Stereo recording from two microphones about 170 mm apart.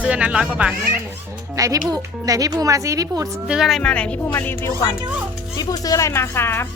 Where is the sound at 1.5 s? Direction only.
20° right (ahead or behind).